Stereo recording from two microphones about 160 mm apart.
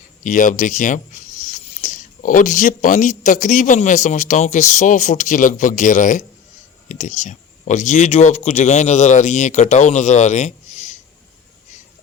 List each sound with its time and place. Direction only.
0.3 s speech: 50° left (ahead or behind)